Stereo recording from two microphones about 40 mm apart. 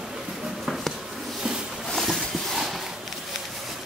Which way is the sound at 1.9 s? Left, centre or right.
Centre.